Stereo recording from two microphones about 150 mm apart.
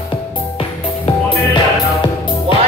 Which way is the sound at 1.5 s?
30° left (ahead or behind).